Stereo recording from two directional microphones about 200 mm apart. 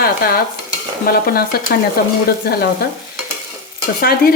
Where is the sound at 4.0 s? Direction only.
50° left (ahead or behind).